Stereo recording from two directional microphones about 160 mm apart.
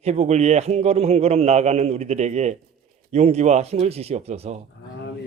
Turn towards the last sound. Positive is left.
turn(degrees=-45)  # may be behind; listen again after turning